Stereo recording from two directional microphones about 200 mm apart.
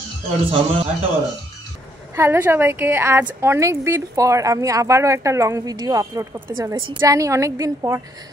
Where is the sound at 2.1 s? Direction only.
10° right (ahead or behind).